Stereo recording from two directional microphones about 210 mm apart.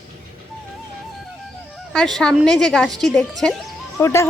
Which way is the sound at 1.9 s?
Centre (ahead or behind).